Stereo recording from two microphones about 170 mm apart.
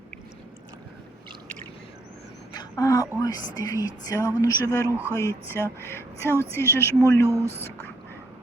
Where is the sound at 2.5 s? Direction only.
20° left (ahead or behind).